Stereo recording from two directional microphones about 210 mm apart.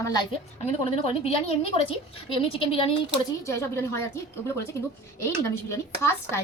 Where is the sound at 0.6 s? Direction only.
30° left (ahead or behind).